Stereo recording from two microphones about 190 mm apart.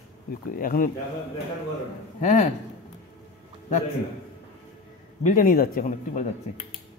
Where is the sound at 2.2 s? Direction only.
35° left (ahead or behind).